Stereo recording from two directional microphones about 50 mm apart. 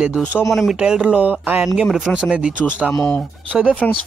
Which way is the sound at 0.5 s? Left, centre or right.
Centre.